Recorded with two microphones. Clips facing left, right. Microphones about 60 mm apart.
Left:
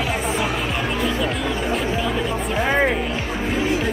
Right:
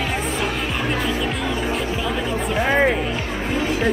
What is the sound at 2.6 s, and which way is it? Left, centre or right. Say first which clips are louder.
Music: right 1 dB; centre.